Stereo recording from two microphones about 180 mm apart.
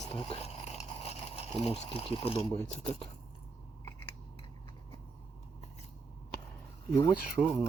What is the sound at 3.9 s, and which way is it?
Scissors, 25° left (ahead or behind).